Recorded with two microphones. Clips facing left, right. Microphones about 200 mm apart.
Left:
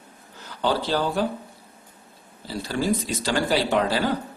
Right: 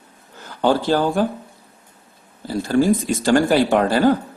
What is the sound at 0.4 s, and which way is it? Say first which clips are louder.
Speech: right 7 dB; 50° right (ahead or behind).